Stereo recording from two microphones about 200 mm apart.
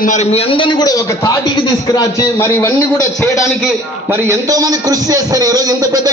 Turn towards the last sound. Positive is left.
turn(degrees=-20)  # may be behind; listen again after turning